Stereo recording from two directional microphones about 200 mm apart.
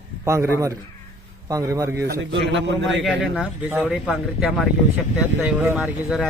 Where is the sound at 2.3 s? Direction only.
65° right (ahead or behind).